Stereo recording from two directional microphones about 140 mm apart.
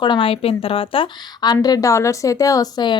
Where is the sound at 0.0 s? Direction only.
35° left (ahead or behind).